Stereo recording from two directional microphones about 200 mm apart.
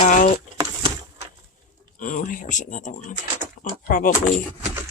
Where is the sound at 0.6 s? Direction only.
20° right (ahead or behind).